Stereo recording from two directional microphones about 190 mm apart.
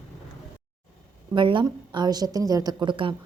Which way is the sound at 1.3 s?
25° right (ahead or behind).